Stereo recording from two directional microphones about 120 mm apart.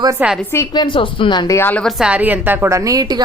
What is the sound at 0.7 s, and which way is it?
Speech, 40° left (ahead or behind).